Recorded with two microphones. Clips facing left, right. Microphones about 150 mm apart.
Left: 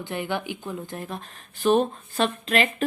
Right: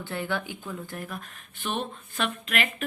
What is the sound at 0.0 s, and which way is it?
Speech, 20° left (ahead or behind).